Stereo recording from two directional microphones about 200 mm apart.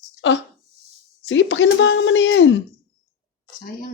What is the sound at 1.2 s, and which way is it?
Speech, 65° left (ahead or behind).